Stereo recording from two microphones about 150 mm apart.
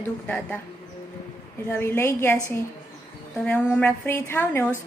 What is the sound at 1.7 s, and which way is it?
Speech, 15° left (ahead or behind).